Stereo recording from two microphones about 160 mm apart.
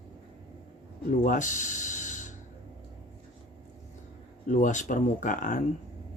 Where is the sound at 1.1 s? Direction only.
55° left (ahead or behind).